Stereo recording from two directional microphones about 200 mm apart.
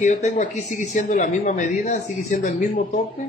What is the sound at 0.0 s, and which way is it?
Speech, 40° left (ahead or behind).